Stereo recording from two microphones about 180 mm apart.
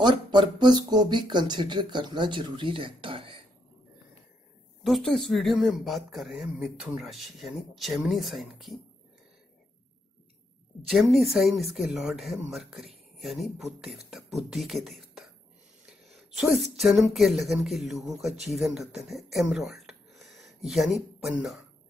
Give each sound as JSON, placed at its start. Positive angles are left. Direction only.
{"t": 0.0, "sound": "speech", "side_deg": -25}
{"t": 4.8, "sound": "speech", "side_deg": 0}
{"t": 10.9, "sound": "speech", "side_deg": 0}
{"t": 16.3, "sound": "speech", "side_deg": 0}
{"t": 19.3, "sound": "a sound", "side_deg": 0}
{"t": 21.2, "sound": "speech", "side_deg": 0}